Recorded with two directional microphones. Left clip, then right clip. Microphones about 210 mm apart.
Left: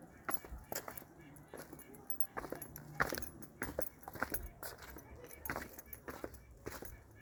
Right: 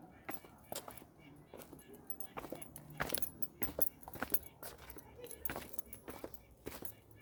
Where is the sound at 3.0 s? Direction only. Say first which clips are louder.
Left 4 dB; 5° right (ahead or behind).